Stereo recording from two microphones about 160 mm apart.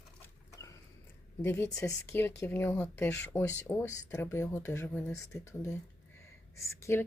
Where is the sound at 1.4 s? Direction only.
10° left (ahead or behind).